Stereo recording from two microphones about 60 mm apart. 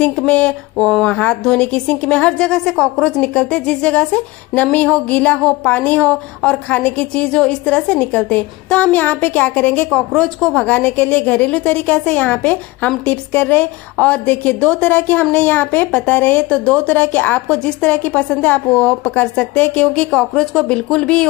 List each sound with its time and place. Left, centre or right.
0.3 s a woman's voice: centre
9.9 s a woman's voice: centre
16.4 s speech: centre
16.9 s a woman's voice: left